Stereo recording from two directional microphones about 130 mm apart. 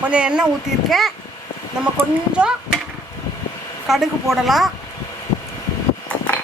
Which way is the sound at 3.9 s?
Centre (ahead or behind).